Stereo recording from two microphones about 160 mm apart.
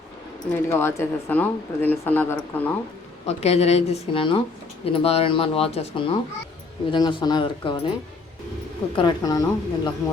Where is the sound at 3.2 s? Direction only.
40° left (ahead or behind).